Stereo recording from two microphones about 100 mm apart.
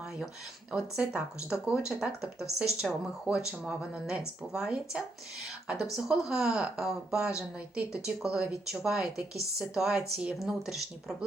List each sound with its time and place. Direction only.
0.7 s speech: 10° right (ahead or behind)